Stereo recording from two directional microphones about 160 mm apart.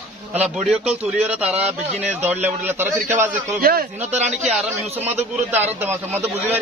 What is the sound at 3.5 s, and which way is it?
Speech, 65° right (ahead or behind).